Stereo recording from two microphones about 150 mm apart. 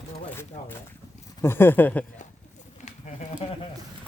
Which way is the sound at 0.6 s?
55° left (ahead or behind).